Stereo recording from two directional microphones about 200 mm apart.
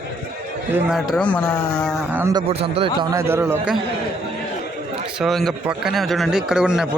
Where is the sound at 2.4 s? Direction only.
30° right (ahead or behind).